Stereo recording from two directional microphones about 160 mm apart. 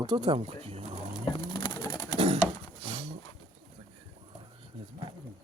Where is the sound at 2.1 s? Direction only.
40° right (ahead or behind).